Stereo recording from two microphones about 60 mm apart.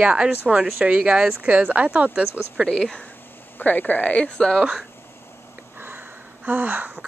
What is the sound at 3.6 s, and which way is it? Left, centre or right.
Speech, left.